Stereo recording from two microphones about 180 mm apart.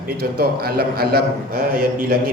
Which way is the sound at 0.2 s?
60° right (ahead or behind).